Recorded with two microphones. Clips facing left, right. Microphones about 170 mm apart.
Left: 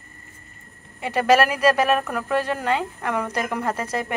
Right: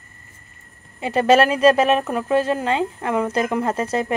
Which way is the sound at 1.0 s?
30° right (ahead or behind).